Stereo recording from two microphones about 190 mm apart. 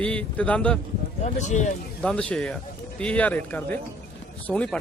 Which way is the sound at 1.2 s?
40° left (ahead or behind).